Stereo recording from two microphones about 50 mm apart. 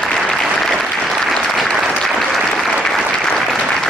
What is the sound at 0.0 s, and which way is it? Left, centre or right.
Applause, centre.